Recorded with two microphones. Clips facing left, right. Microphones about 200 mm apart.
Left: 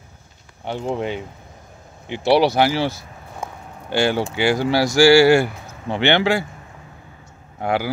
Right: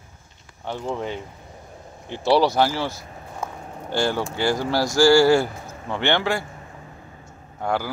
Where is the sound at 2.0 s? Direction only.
70° left (ahead or behind).